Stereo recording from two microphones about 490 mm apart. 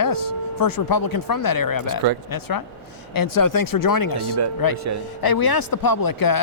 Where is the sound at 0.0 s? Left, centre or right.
Left.